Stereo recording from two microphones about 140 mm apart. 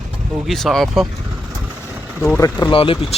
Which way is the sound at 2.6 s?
35° left (ahead or behind).